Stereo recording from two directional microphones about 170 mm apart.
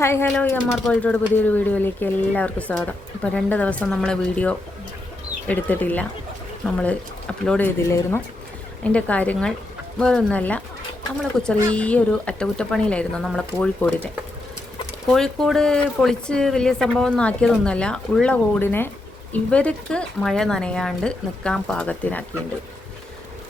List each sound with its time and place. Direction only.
0.0 s speech: 15° left (ahead or behind)
7.9 s speech: 15° left (ahead or behind)